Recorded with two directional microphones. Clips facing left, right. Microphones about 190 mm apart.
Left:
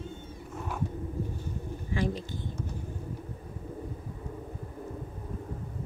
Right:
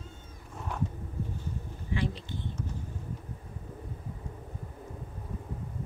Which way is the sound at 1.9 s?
45° left (ahead or behind).